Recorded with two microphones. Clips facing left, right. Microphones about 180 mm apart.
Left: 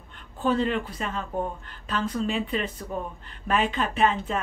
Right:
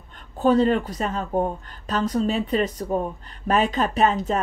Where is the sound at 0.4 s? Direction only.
40° right (ahead or behind).